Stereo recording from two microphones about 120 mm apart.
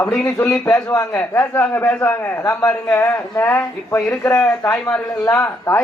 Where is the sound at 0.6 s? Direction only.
25° left (ahead or behind).